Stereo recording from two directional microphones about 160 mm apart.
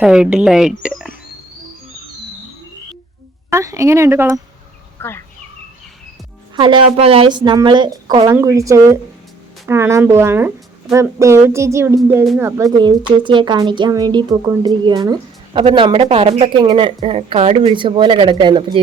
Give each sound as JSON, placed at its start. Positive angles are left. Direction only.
{"t": 0.0, "sound": "a woman's voice", "side_deg": -5}
{"t": 3.5, "sound": "a sound", "side_deg": -20}
{"t": 4.9, "sound": "speech", "side_deg": 15}
{"t": 6.6, "sound": "speech", "side_deg": -30}
{"t": 9.6, "sound": "a sound", "side_deg": -15}
{"t": 12.7, "sound": "speech", "side_deg": -30}